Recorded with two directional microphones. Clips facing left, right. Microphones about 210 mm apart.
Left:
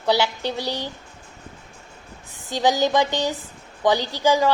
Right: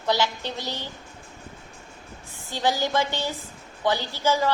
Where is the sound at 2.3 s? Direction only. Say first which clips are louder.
Left 5 dB; 15° left (ahead or behind).